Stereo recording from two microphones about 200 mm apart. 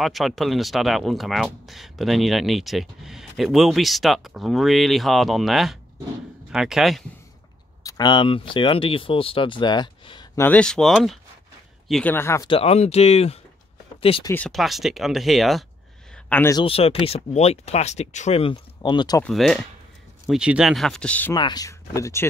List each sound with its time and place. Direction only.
0.0 s speech: centre (ahead or behind)
7.8 s speech: 20° left (ahead or behind)
10.4 s speech: 5° left (ahead or behind)
12.4 s speech: 30° left (ahead or behind)
14.3 s speech: 5° left (ahead or behind)
16.3 s speech: 10° left (ahead or behind)
16.6 s speech: 30° left (ahead or behind)
19.2 s speech: centre (ahead or behind)
21.4 s speech: 20° left (ahead or behind)